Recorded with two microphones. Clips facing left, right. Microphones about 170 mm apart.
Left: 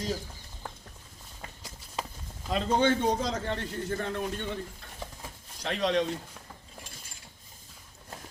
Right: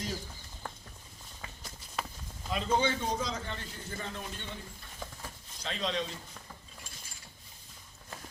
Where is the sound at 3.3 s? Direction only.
65° left (ahead or behind).